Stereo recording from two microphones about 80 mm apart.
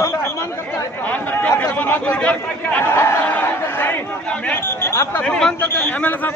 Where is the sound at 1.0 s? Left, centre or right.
Left.